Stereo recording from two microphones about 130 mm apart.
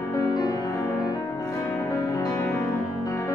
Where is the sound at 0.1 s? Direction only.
30° left (ahead or behind).